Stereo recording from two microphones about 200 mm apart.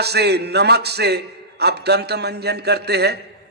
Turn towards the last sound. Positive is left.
turn(degrees=-55)  # may be behind; listen again after turning